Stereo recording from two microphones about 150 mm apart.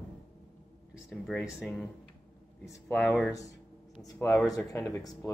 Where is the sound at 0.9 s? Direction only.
Centre (ahead or behind).